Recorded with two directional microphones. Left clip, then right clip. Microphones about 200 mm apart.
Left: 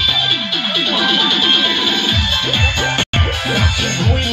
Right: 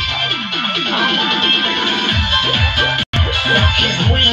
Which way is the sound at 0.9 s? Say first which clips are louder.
Left 1 dB; 30° left (ahead or behind).